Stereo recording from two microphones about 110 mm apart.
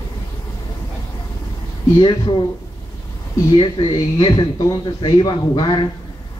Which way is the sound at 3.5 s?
50° left (ahead or behind).